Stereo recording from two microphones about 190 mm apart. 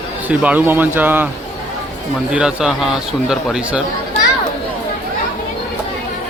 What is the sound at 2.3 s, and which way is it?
Speech, 5° right (ahead or behind).